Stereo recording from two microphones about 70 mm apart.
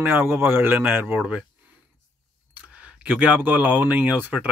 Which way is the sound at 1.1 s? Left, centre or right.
Centre.